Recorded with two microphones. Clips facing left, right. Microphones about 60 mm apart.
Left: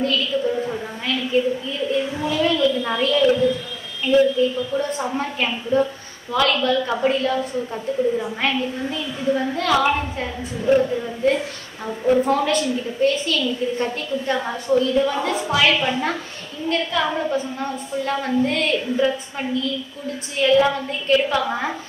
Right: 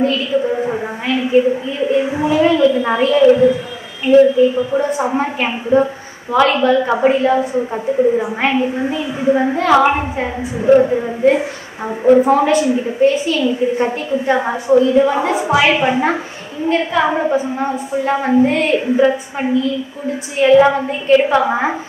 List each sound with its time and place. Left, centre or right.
0.0 s a woman's voice: right
4.8 s a woman's voice: centre
5.1 s a woman's voice: right